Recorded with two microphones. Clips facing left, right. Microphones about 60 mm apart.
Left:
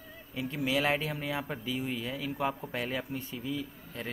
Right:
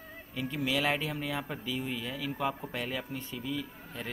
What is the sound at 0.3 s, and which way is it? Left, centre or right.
Speech, centre.